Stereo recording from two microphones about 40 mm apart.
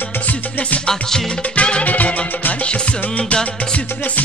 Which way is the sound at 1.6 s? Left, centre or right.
Left.